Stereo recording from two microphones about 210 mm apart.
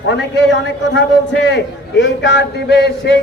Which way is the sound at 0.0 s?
60° left (ahead or behind).